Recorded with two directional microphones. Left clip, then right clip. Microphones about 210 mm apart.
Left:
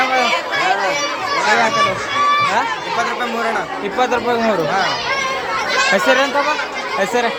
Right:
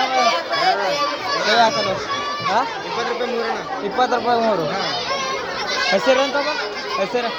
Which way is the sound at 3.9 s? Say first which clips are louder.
Left 1 dB; 25° left (ahead or behind).